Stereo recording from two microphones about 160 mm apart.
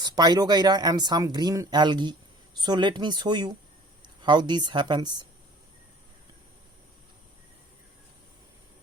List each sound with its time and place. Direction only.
0.0 s speech: 25° right (ahead or behind)